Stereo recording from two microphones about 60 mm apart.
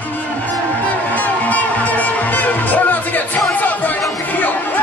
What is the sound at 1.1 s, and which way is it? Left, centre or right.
Music, left.